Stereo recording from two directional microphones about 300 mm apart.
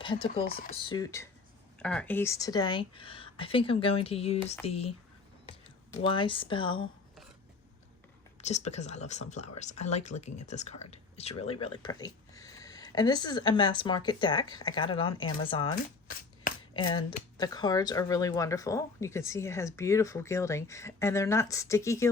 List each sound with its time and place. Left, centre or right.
0.0 s speech: centre
8.4 s speech: left